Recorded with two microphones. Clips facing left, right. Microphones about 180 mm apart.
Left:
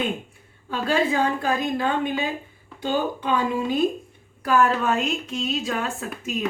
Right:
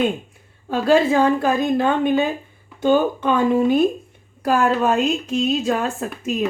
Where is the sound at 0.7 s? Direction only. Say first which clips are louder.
Right 7 dB; 45° right (ahead or behind).